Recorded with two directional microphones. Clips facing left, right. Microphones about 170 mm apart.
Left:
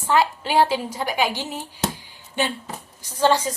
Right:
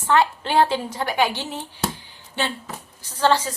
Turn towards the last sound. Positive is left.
turn(degrees=15)  # may be behind; listen again after turning